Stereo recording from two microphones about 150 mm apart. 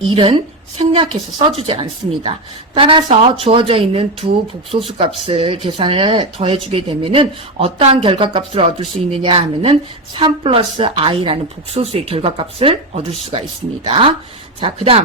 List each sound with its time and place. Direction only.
0.1 s a woman's voice: 35° right (ahead or behind)